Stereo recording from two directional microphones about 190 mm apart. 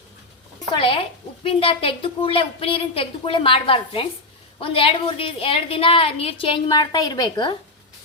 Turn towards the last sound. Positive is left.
turn(degrees=25)  # may be behind; listen again after turning